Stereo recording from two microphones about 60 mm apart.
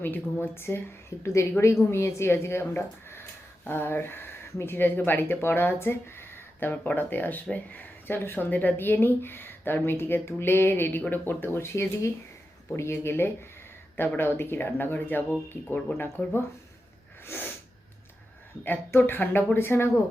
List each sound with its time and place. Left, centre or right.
0.0 s speech: left
17.2 s sneeze: left
18.9 s speech: left